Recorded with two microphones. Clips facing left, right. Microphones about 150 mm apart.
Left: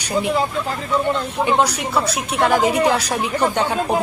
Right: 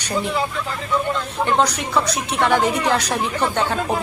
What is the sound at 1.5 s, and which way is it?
A woman's voice, 10° left (ahead or behind).